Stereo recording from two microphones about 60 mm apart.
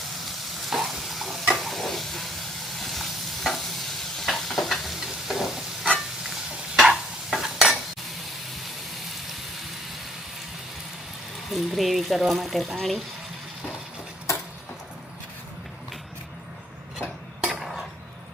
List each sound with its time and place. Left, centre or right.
0.7 s stir: centre
11.5 s speech: centre
17.4 s a sound: centre